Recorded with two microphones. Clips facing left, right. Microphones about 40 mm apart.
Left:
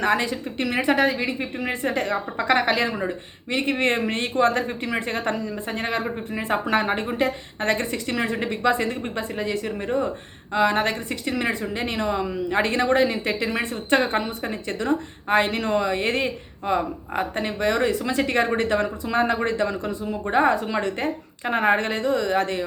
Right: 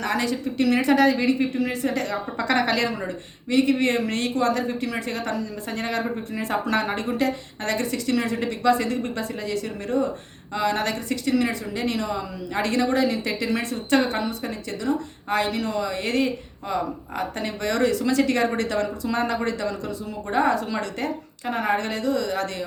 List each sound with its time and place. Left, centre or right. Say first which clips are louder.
0.0 s a woman's voice: left 2 dB; left
3.5 s a woman's voice: right 2 dB; left